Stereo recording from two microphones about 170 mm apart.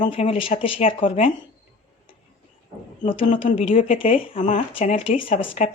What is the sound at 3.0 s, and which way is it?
Speech, 30° left (ahead or behind).